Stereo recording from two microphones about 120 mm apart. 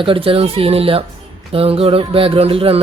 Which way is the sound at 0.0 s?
45° right (ahead or behind).